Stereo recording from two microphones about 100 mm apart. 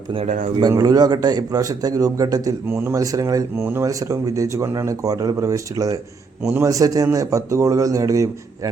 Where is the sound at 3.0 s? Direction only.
35° right (ahead or behind).